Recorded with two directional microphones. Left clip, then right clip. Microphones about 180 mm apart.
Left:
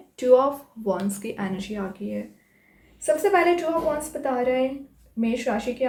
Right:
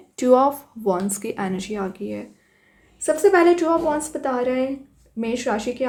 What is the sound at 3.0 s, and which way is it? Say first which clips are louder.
Speech: right 4 dB; 50° right (ahead or behind).